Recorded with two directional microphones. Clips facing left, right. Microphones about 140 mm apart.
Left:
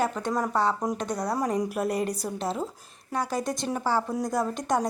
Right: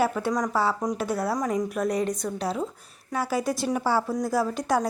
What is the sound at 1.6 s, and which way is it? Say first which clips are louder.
Speech: right 1 dB; 5° left (ahead or behind).